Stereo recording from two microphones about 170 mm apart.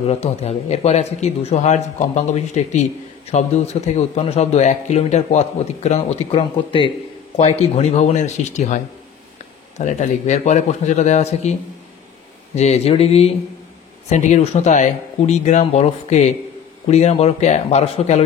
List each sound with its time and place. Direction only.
0.0 s speech: 35° left (ahead or behind)
12.5 s speech: 40° left (ahead or behind)